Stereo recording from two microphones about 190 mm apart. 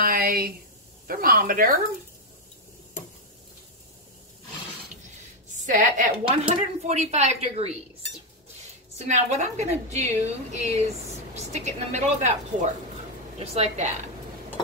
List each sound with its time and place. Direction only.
0.0 s a woman's voice: 50° right (ahead or behind)
5.6 s a woman's voice: 45° right (ahead or behind)
8.9 s a woman's voice: 35° right (ahead or behind)
13.4 s a woman's voice: 35° right (ahead or behind)